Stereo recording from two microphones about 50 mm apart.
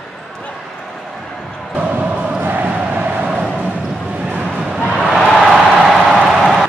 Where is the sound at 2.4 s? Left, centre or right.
Right.